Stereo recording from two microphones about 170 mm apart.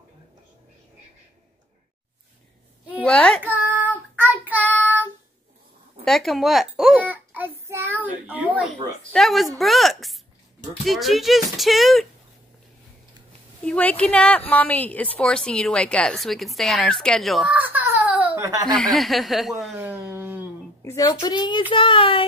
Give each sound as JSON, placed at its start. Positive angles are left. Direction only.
{"t": 3.0, "sound": "a child's voice", "side_deg": 5}
{"t": 3.4, "sound": "child singing", "side_deg": -10}
{"t": 4.6, "sound": "child singing", "side_deg": 10}
{"t": 6.0, "sound": "a child's voice", "side_deg": 0}
{"t": 9.1, "sound": "a woman's voice", "side_deg": 0}
{"t": 13.7, "sound": "a woman's voice", "side_deg": 10}
{"t": 17.6, "sound": "a sound", "side_deg": -10}
{"t": 18.7, "sound": "a woman's voice", "side_deg": 0}
{"t": 19.8, "sound": "a sound", "side_deg": -10}
{"t": 20.8, "sound": "a child's voice", "side_deg": 20}